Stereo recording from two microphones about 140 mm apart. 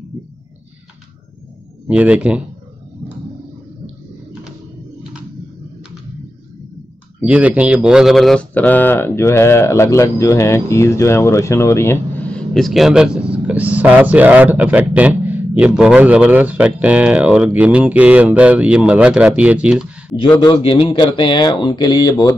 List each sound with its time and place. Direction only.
1.9 s speech: 10° right (ahead or behind)
7.2 s speech: 10° right (ahead or behind)
20.2 s speech: 35° left (ahead or behind)